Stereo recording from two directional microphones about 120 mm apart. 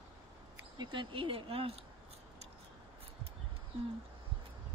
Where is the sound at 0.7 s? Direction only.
45° right (ahead or behind).